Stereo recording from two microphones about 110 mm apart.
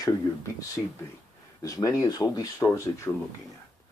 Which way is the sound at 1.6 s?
30° left (ahead or behind).